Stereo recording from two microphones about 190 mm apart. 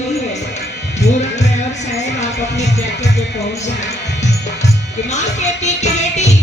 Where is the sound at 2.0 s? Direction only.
35° left (ahead or behind).